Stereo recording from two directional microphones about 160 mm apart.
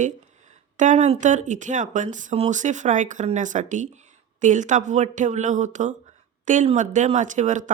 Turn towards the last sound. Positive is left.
turn(degrees=-50)  # may be behind; listen again after turning